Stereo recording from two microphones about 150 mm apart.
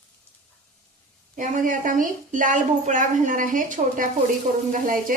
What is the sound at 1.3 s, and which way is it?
A woman's voice, 60° right (ahead or behind).